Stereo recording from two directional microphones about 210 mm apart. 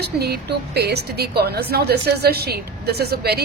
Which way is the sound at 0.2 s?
50° right (ahead or behind).